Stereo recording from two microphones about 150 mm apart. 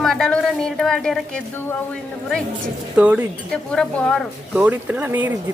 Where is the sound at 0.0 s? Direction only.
Centre (ahead or behind).